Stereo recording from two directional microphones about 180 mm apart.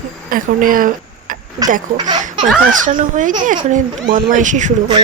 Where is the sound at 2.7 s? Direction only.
45° right (ahead or behind).